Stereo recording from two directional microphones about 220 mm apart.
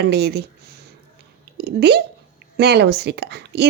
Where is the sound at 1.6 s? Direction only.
50° right (ahead or behind).